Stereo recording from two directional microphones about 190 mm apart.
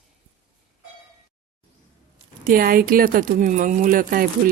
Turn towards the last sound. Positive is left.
turn(degrees=-45)  # may be behind; listen again after turning